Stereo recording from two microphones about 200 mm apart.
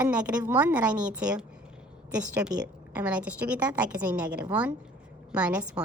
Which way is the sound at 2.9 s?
5° right (ahead or behind).